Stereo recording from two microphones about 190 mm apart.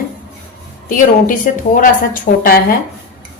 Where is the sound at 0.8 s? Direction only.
45° left (ahead or behind).